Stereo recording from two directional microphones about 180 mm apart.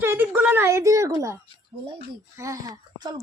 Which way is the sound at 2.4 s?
15° right (ahead or behind).